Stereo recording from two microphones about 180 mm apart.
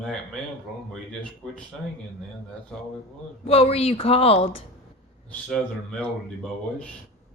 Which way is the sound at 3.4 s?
35° left (ahead or behind).